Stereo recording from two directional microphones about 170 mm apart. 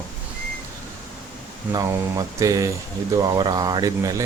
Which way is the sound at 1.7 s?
20° right (ahead or behind).